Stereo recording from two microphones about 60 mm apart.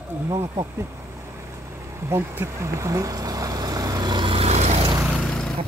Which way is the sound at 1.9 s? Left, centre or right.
Right.